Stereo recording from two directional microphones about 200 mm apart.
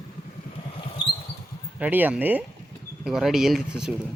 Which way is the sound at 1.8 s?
10° right (ahead or behind).